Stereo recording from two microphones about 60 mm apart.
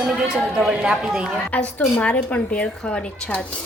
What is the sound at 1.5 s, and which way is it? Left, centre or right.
A woman's voice, left.